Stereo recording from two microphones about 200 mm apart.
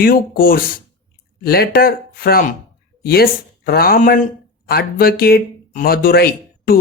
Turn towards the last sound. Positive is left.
turn(degrees=50)  # may be behind; listen again after turning